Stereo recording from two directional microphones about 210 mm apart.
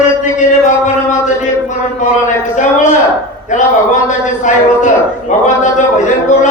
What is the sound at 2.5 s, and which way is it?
A man's voice, 35° left (ahead or behind).